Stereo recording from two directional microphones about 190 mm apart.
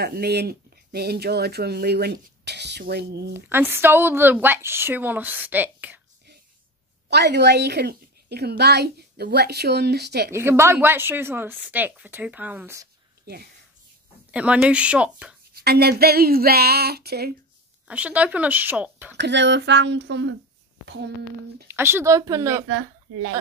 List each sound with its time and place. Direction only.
0.0 s a woman's voice: 55° right (ahead or behind)
3.3 s a woman's voice: 10° right (ahead or behind)
7.1 s a woman's voice: 60° right (ahead or behind)
10.3 s a woman's voice: 15° right (ahead or behind)
14.3 s a woman's voice: 5° right (ahead or behind)
15.5 s a woman's voice: 55° right (ahead or behind)
17.8 s a woman's voice: 5° right (ahead or behind)
19.1 s speech: 65° right (ahead or behind)
21.6 s a woman's voice: 10° right (ahead or behind)
22.7 s speech: 70° right (ahead or behind)